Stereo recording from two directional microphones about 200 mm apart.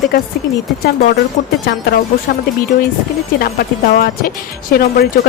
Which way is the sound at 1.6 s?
50° left (ahead or behind).